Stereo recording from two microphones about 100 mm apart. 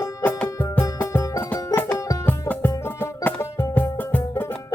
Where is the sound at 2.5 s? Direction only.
20° left (ahead or behind).